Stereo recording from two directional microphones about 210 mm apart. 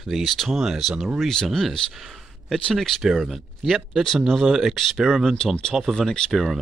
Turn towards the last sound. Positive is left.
turn(degrees=0)  # may be behind; listen again after turning